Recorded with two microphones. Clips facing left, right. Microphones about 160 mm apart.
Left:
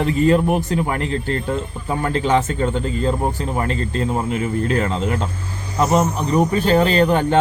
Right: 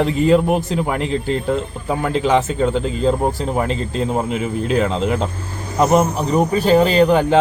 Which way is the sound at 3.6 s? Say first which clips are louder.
Right 2 dB; 20° right (ahead or behind).